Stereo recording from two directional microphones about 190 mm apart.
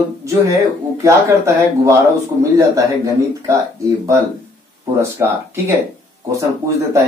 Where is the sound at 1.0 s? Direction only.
15° right (ahead or behind).